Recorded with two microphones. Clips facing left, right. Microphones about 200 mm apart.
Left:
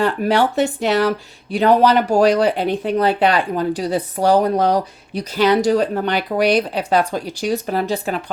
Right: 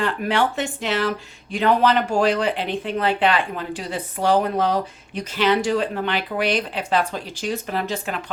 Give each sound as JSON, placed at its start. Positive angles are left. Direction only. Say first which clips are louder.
{"t": 0.0, "sound": "speech", "louder": "left 5 dB", "side_deg": 40}